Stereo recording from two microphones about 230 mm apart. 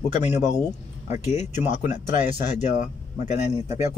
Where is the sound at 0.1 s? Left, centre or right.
Left.